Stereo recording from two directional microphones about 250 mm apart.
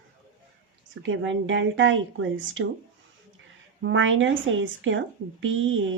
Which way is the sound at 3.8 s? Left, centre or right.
Right.